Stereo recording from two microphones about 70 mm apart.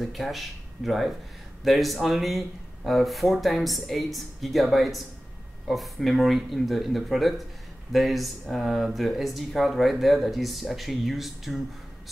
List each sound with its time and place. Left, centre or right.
0.0 s speech: centre